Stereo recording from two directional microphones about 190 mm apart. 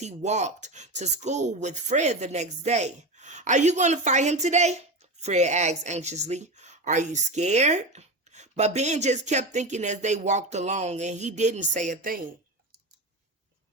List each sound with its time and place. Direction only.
0.0 s speech: 35° right (ahead or behind)